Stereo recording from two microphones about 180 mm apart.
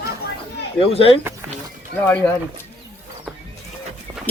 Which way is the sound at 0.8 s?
30° left (ahead or behind).